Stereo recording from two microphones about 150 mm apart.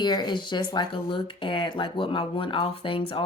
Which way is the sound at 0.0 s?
30° left (ahead or behind).